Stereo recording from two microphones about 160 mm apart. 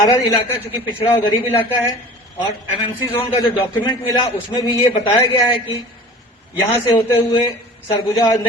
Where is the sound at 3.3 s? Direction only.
30° left (ahead or behind).